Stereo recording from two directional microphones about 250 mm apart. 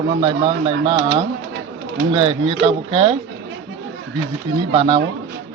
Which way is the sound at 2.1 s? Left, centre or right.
Right.